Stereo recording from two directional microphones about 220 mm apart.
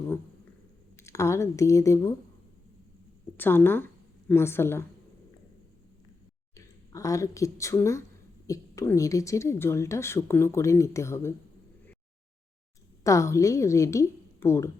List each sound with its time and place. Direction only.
0.9 s speech: 15° left (ahead or behind)
3.3 s a woman's voice: 10° left (ahead or behind)
6.9 s a woman's voice: 15° left (ahead or behind)
13.1 s a woman's voice: 15° left (ahead or behind)